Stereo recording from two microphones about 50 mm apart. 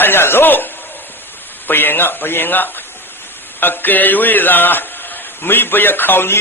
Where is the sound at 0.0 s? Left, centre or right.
Left.